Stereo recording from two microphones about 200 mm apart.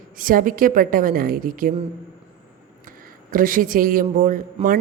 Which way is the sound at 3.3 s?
45° right (ahead or behind).